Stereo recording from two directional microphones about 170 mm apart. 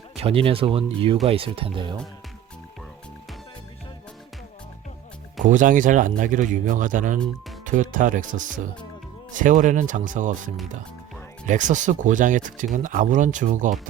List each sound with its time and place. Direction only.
0.2 s speech: 35° right (ahead or behind)
5.4 s speech: 50° right (ahead or behind)